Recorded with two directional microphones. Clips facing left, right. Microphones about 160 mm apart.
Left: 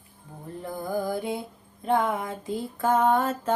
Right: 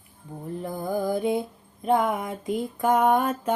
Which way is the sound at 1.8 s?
20° right (ahead or behind).